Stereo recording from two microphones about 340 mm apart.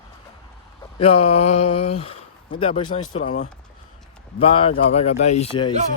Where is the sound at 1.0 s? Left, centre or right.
Centre.